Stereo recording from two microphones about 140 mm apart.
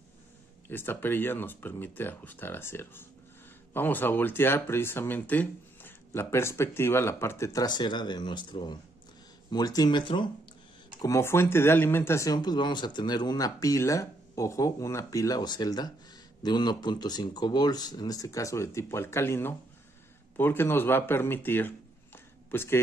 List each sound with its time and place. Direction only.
0.7 s speech: 15° left (ahead or behind); by 10.3 s 35° left (ahead or behind)
11.0 s speech: 20° left (ahead or behind)